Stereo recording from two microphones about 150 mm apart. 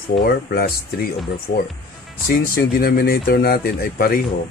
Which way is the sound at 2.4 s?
80° left.